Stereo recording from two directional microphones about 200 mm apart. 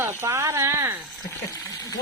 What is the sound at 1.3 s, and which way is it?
Speech, 15° left (ahead or behind).